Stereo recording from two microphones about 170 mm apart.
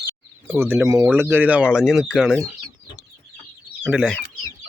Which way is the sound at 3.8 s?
Centre (ahead or behind).